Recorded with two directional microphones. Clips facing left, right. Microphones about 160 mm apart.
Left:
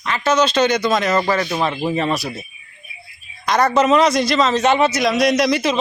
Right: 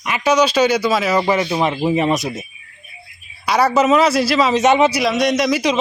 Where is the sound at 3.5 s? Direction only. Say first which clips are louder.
Right 1 dB; 10° right (ahead or behind).